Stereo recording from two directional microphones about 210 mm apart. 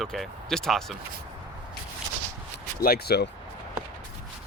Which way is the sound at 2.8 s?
50° left (ahead or behind).